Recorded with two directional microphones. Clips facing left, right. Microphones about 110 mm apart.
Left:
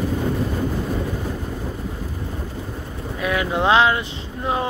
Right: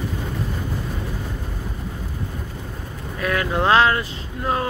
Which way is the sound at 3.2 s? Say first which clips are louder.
Even; 15° left (ahead or behind).